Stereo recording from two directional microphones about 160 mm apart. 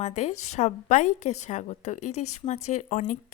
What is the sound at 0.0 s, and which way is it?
A woman's voice, 45° left (ahead or behind).